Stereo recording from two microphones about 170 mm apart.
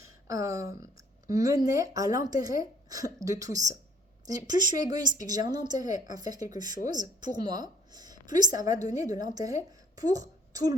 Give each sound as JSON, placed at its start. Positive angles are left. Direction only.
{"t": 0.0, "sound": "a woman's voice", "side_deg": -20}